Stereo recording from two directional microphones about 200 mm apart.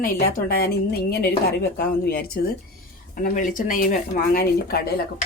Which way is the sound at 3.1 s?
40° left (ahead or behind).